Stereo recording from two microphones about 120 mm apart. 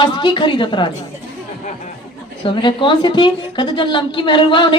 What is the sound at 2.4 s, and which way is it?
A woman's voice, 45° left (ahead or behind).